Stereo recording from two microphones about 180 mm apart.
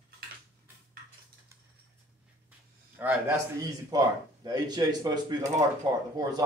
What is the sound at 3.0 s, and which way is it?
Speech, 10° right (ahead or behind).